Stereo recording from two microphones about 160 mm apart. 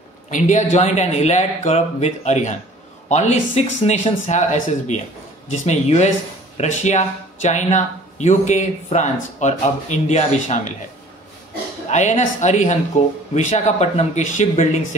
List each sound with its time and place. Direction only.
0.3 s speech: 50° left (ahead or behind)
11.9 s speech: 45° left (ahead or behind)